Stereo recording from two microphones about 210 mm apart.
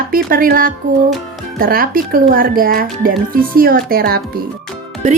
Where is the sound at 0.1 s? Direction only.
45° right (ahead or behind).